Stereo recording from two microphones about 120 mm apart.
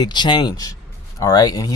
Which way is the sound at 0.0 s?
40° left (ahead or behind).